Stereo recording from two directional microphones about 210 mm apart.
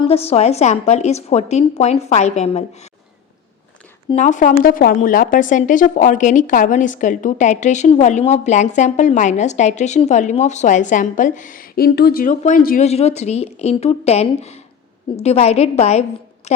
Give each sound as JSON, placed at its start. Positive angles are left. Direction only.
{"t": 0.0, "sound": "speech", "side_deg": 30}
{"t": 4.1, "sound": "speech", "side_deg": 35}